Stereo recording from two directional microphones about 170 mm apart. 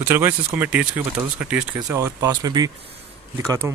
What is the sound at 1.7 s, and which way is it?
Speech, 20° right (ahead or behind).